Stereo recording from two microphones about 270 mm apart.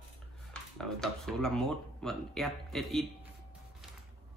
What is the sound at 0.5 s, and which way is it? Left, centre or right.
Speech, centre.